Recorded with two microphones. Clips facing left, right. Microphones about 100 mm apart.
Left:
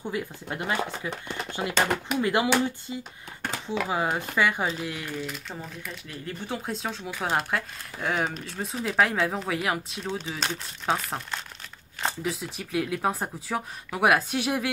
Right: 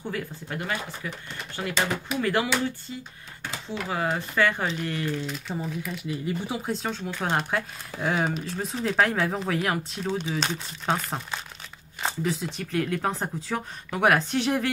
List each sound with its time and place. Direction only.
0.1 s speech: 20° left (ahead or behind)
1.7 s speech: 55° left (ahead or behind)
2.2 s speech: 20° left (ahead or behind); by 5.9 s centre (ahead or behind)
6.0 s speech: 15° right (ahead or behind)
6.6 s speech: centre (ahead or behind)